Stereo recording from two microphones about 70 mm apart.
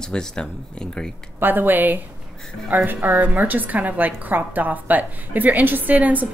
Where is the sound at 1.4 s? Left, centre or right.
Right.